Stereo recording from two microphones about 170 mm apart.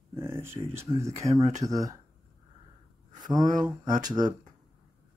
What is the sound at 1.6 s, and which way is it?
Speech, 20° right (ahead or behind).